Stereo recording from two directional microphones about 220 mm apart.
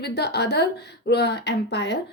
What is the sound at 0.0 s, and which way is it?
A woman's voice, 50° left (ahead or behind).